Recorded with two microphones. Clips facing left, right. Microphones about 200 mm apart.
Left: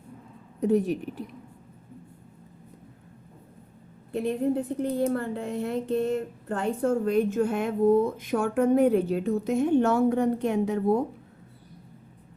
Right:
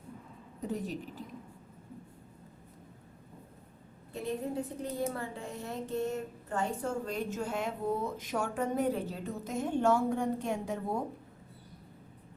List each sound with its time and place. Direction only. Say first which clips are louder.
0.6 s a woman's voice: left 12 dB; 70° left (ahead or behind)
4.1 s a woman's voice: left 9 dB; 60° left (ahead or behind)